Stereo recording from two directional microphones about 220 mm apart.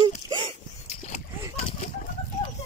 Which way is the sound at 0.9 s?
30° left (ahead or behind).